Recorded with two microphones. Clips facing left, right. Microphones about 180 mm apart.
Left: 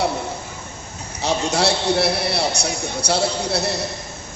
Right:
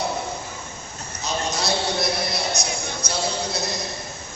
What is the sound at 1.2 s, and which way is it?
A man's voice, 70° left (ahead or behind).